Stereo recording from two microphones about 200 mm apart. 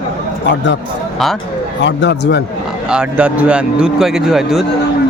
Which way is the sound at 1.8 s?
60° left (ahead or behind).